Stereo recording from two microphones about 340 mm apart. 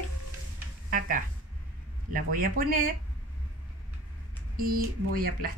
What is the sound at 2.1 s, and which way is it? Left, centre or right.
Speech, right.